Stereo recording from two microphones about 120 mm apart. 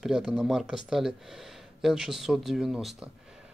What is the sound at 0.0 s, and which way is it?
Speech, centre (ahead or behind).